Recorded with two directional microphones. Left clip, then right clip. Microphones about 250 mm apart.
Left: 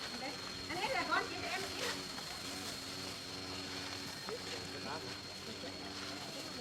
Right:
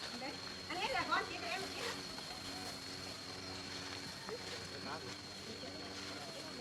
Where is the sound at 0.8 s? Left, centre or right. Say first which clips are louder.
Left 1 dB; right.